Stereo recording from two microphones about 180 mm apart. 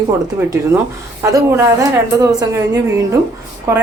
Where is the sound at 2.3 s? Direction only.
20° right (ahead or behind).